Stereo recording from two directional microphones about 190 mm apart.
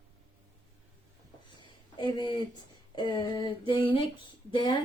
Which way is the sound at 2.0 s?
25° left (ahead or behind).